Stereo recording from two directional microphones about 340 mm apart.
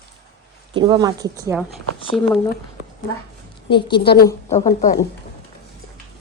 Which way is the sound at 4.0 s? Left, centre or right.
Left.